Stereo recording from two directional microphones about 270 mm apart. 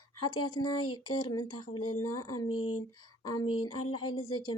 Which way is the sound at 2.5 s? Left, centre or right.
Left.